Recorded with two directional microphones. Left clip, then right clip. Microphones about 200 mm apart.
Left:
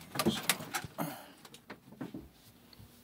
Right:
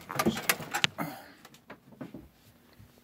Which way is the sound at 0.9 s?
10° right (ahead or behind).